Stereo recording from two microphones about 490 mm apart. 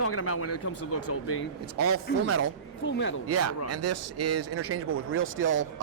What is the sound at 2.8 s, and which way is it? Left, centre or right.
Speech, left.